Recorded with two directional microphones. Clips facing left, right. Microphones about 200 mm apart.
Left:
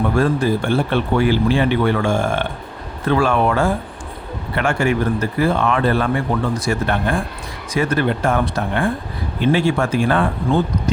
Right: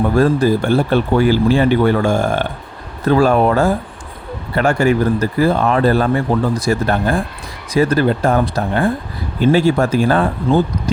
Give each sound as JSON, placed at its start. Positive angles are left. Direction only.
{"t": 0.2, "sound": "speech", "side_deg": -40}